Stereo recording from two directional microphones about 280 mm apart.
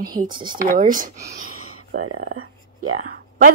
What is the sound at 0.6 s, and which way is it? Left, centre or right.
Speech, right.